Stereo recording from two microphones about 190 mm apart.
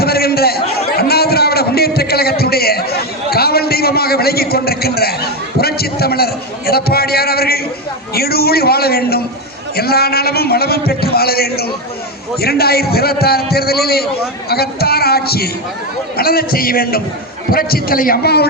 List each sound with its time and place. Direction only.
0.0 s chatter: 55° left (ahead or behind)
0.9 s a sound: 55° left (ahead or behind)
5.5 s a man's voice: 55° left (ahead or behind)